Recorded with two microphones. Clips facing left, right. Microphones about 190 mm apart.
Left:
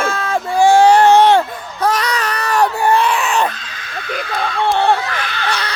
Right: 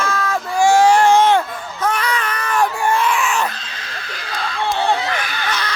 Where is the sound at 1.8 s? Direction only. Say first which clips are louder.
Left 3 dB; 35° left (ahead or behind).